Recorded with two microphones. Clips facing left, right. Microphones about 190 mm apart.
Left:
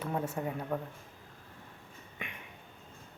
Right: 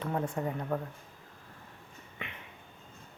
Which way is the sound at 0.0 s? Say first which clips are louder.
Right 2 dB; 10° left (ahead or behind).